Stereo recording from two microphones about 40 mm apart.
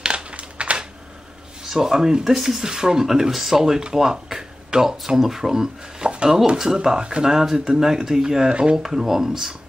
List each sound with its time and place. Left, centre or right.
0.0 s a sound: right
1.7 s speech: centre
6.0 s speech: right
7.2 s speech: centre